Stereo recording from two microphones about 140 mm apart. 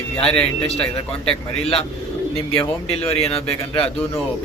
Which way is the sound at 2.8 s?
45° left (ahead or behind).